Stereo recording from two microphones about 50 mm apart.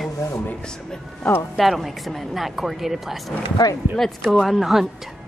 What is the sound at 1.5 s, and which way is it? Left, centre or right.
Speech, centre.